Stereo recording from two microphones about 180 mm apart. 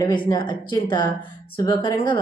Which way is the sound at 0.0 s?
25° left (ahead or behind).